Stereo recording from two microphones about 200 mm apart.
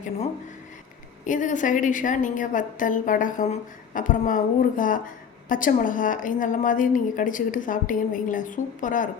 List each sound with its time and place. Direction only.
1.2 s a woman's voice: 40° left (ahead or behind)